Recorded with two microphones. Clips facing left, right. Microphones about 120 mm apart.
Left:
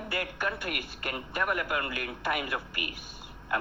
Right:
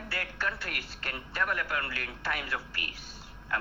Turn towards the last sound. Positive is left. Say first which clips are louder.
# left 3 dB
turn(degrees=15)  # may be behind; listen again after turning